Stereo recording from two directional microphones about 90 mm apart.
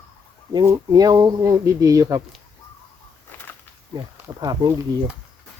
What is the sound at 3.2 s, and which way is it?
Whip, 20° left (ahead or behind).